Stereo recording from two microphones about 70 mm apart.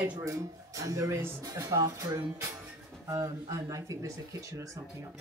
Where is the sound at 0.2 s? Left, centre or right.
Right.